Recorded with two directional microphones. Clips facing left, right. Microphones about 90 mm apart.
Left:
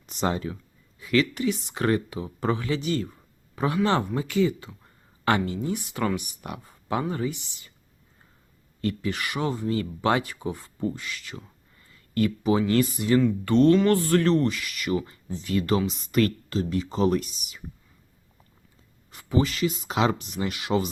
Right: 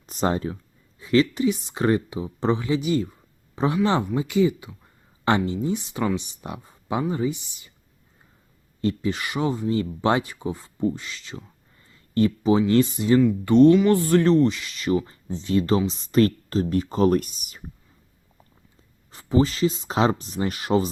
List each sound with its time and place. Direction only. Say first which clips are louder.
0.0 s speech: right 3 dB; 40° right (ahead or behind); by 7.7 s 20° right (ahead or behind)
8.8 s speech: right 3 dB; 20° right (ahead or behind); by 17.6 s 45° right (ahead or behind)
19.1 s speech: right 4 dB; 30° right (ahead or behind)